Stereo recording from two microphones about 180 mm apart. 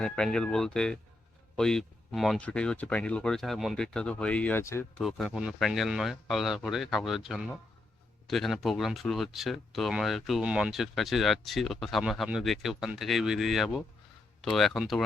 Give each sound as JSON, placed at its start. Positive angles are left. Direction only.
{"t": 0.0, "sound": "speech", "side_deg": 5}
{"t": 4.9, "sound": "speech", "side_deg": 0}